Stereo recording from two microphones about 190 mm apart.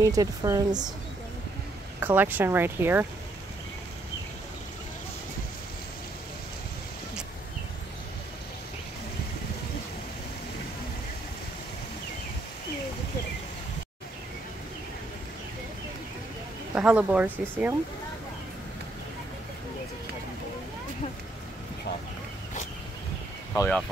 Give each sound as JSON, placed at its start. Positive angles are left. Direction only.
{"t": 0.0, "sound": "speech", "side_deg": -20}
{"t": 2.0, "sound": "speech", "side_deg": -10}
{"t": 16.7, "sound": "speech", "side_deg": -5}
{"t": 23.5, "sound": "speech", "side_deg": 15}